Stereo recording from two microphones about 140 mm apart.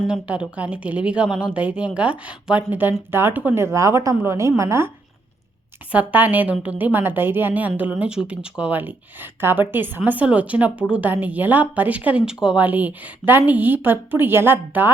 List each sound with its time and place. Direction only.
0.1 s a woman's voice: 10° right (ahead or behind)
5.9 s a woman's voice: 10° right (ahead or behind)